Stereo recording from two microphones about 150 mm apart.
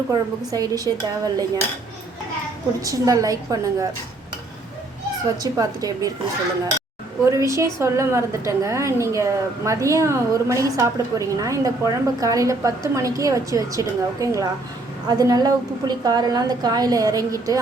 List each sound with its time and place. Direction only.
0.1 s a woman's voice: 25° right (ahead or behind)
2.8 s a woman's voice: 25° right (ahead or behind)
5.4 s a woman's voice: 25° right (ahead or behind)
7.3 s a woman's voice: 20° right (ahead or behind)